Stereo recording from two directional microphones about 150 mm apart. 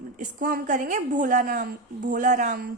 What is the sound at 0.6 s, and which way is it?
A woman's voice, 55° right (ahead or behind).